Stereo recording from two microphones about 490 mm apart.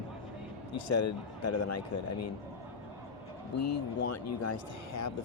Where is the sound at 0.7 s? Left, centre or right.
Left.